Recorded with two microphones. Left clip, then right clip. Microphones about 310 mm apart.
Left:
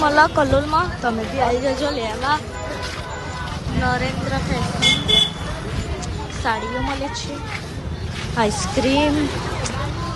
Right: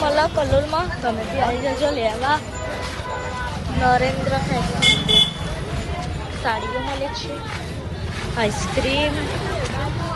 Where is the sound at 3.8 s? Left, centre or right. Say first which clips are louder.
Right 5 dB; centre.